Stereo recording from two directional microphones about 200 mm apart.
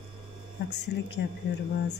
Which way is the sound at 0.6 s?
60° left (ahead or behind).